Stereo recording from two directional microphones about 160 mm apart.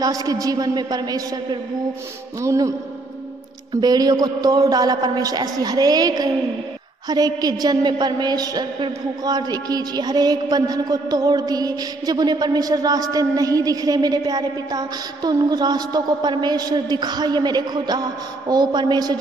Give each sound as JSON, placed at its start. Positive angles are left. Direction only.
{"t": 0.0, "sound": "a woman's voice", "side_deg": -25}
{"t": 3.7, "sound": "a woman's voice", "side_deg": -25}